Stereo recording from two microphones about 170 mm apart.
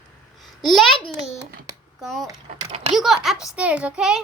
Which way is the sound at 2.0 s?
Centre (ahead or behind).